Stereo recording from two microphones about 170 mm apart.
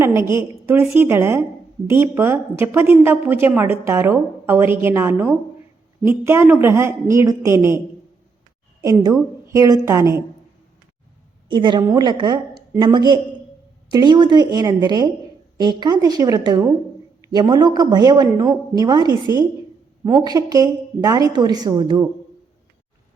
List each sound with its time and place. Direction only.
0.0 s a woman's voice: 15° right (ahead or behind)
8.8 s a woman's voice: 20° right (ahead or behind)
11.4 s a woman's voice: 25° right (ahead or behind)